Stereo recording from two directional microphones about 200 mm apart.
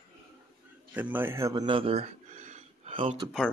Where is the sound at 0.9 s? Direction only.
10° right (ahead or behind); by 3.2 s 30° right (ahead or behind).